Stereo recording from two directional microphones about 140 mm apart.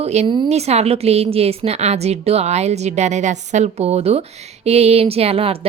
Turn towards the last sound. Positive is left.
turn(degrees=-45)  # may be behind; listen again after turning